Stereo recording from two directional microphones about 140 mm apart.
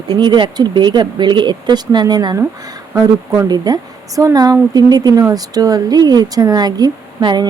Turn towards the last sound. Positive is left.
turn(degrees=-30)  # may be behind; listen again after turning